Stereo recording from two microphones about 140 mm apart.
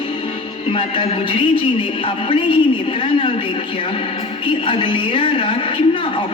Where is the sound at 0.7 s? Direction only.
35° left (ahead or behind).